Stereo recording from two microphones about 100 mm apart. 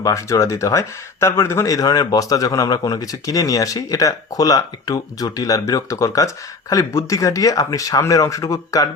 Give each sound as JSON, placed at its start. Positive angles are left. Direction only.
{"t": 0.0, "sound": "speech", "side_deg": 30}